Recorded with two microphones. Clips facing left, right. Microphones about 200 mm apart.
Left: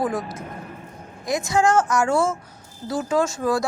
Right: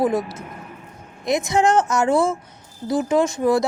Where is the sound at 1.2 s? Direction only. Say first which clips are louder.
Right 2 dB; 20° right (ahead or behind).